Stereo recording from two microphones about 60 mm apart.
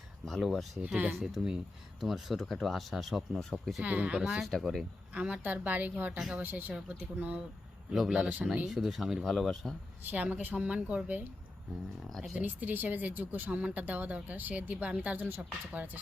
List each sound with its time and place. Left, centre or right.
0.3 s speech: centre
3.8 s speech: right
4.2 s a man's voice: centre
4.4 s speech: centre
5.1 s speech: right
7.9 s a man's voice: centre
8.2 s speech: right
8.6 s speech: centre
10.1 s speech: right
12.4 s speech: right